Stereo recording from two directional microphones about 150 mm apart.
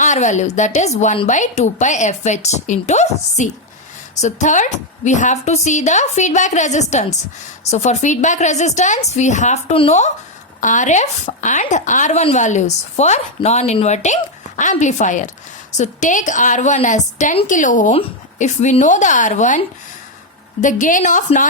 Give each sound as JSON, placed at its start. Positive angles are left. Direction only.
{"t": 0.0, "sound": "a woman's voice", "side_deg": 55}
{"t": 10.6, "sound": "a woman's voice", "side_deg": 55}